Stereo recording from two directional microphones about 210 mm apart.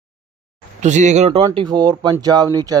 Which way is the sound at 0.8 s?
35° right (ahead or behind).